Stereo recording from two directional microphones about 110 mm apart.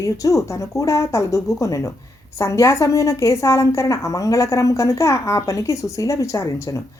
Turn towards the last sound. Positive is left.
turn(degrees=25)  # may be behind; listen again after turning